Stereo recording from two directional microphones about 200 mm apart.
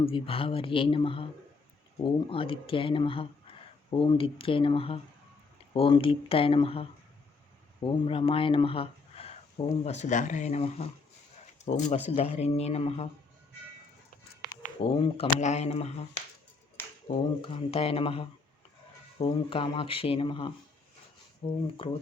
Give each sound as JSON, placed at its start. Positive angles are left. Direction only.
{"t": 0.0, "sound": "speech", "side_deg": 25}
{"t": 14.6, "sound": "speech", "side_deg": 30}
{"t": 17.1, "sound": "speech", "side_deg": 30}